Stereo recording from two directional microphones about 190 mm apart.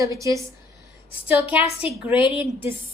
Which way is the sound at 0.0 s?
15° right (ahead or behind).